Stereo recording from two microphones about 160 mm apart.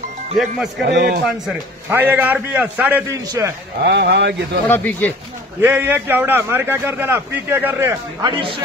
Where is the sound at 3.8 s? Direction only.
90° right.